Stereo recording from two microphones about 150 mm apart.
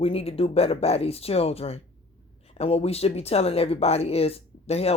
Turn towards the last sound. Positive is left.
turn(degrees=40)  # may be behind; listen again after turning